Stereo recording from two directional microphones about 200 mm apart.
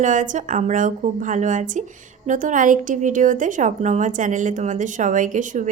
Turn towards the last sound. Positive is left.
turn(degrees=-40)  # may be behind; listen again after turning